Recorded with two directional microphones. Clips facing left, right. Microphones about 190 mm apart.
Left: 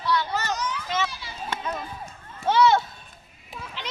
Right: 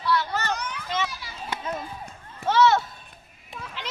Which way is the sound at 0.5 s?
60° right (ahead or behind).